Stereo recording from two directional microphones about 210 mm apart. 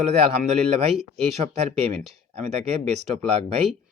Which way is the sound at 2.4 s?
30° right (ahead or behind).